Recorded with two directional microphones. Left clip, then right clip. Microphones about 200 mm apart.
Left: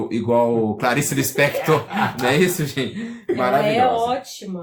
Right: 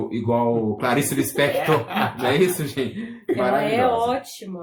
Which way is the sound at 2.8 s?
30° left (ahead or behind).